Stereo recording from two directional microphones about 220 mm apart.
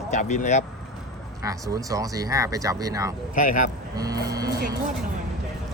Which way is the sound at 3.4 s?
35° left (ahead or behind).